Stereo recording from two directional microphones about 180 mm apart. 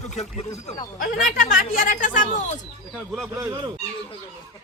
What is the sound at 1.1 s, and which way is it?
Speech, 50° left (ahead or behind).